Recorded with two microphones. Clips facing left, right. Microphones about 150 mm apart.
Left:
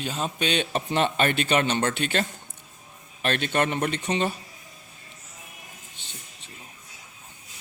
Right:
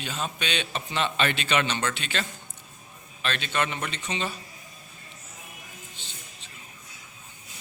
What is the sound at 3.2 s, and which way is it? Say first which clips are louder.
A man's voice: left 4 dB; 50° left (ahead or behind).